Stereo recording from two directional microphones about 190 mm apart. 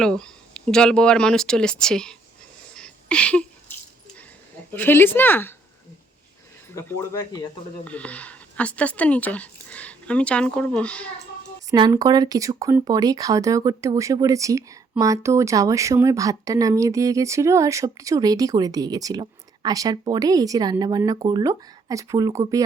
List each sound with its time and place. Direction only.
0.0 s speech: 5° left (ahead or behind)
2.7 s a sound: 5° left (ahead or behind)
4.7 s speech: 10° left (ahead or behind)
7.9 s speech: 5° left (ahead or behind)
11.7 s speech: 20° right (ahead or behind)